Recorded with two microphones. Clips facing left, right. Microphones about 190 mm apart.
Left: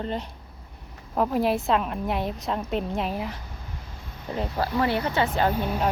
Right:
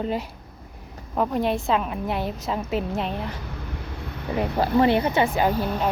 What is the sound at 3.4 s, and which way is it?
Vehicle, 70° right (ahead or behind).